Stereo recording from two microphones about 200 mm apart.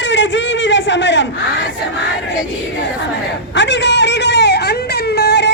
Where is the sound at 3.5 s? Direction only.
60° left (ahead or behind).